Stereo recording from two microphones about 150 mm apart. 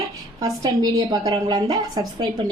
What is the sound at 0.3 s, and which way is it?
A woman's voice, 25° right (ahead or behind).